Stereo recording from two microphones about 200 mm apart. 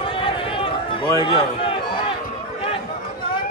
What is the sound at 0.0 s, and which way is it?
Run, 25° left (ahead or behind).